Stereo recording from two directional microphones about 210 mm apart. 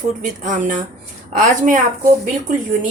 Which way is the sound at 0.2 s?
40° right (ahead or behind).